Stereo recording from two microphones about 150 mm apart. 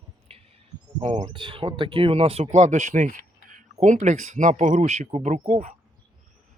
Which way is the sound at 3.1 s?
90° left.